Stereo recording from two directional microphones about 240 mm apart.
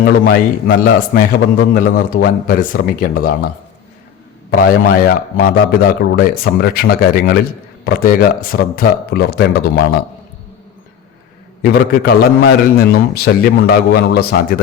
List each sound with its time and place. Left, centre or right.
0.0 s a man's voice: left
4.5 s a man's voice: left
11.6 s a man's voice: left